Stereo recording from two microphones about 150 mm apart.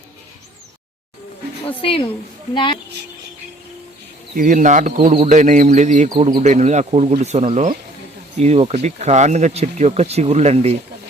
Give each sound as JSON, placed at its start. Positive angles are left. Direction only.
{"t": 1.8, "sound": "a woman's voice", "side_deg": 40}
{"t": 4.4, "sound": "speech", "side_deg": -60}
{"t": 6.1, "sound": "speech", "side_deg": -40}